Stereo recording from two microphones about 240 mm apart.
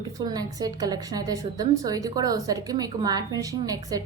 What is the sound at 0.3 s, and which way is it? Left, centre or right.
A woman's voice, centre.